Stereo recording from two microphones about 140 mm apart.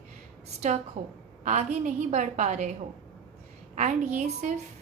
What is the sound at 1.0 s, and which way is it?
A woman's voice, 55° right (ahead or behind).